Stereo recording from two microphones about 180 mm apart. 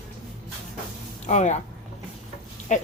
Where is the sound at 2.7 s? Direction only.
40° left (ahead or behind).